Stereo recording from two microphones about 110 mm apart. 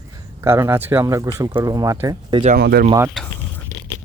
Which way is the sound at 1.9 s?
25° right (ahead or behind).